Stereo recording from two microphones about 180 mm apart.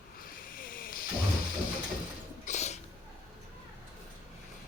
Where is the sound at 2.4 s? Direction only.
40° left (ahead or behind).